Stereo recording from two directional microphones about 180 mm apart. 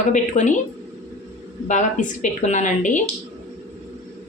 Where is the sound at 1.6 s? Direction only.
40° left (ahead or behind).